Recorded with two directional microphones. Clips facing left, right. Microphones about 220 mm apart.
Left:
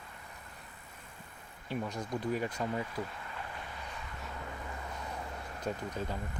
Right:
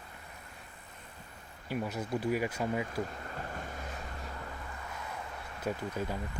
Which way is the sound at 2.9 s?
45° right (ahead or behind).